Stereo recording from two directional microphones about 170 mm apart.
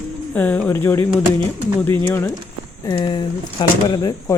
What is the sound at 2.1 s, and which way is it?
Speech, 15° left (ahead or behind).